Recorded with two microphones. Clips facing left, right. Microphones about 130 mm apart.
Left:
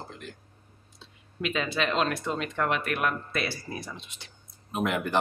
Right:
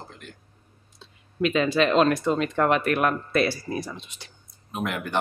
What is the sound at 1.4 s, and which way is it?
Speech, 40° right (ahead or behind).